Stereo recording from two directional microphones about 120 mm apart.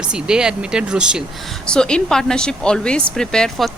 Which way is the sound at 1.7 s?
5° left (ahead or behind).